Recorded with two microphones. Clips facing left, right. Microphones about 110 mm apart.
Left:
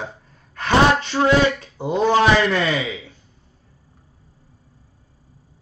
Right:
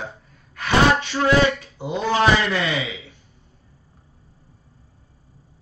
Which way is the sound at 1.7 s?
45° left (ahead or behind).